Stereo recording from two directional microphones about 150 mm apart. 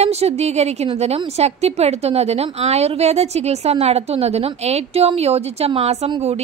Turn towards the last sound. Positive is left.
turn(degrees=-45)  # may be behind; listen again after turning